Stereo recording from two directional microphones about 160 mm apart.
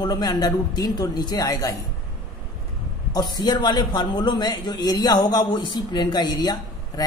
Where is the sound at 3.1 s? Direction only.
25° left (ahead or behind).